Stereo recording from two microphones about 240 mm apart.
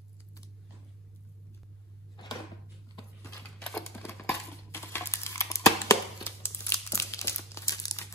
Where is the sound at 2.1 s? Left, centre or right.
Centre.